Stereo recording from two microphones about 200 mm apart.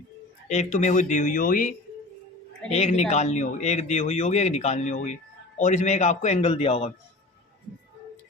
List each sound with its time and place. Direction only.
0.4 s speech: 35° left (ahead or behind)
2.7 s speech: 35° left (ahead or behind)